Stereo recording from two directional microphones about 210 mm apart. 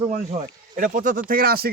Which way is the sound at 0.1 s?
35° right (ahead or behind).